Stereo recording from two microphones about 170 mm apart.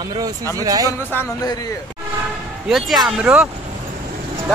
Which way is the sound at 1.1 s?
15° left (ahead or behind).